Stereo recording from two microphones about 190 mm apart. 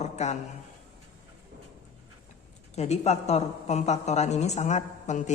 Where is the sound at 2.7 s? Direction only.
35° left (ahead or behind).